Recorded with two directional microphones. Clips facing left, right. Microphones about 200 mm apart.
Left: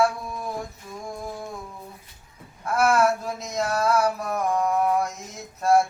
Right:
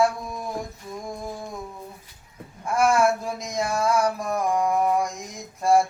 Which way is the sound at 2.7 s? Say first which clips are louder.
Even; 10° right (ahead or behind).